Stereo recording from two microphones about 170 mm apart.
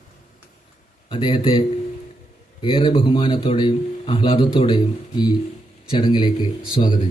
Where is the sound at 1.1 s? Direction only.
30° left (ahead or behind).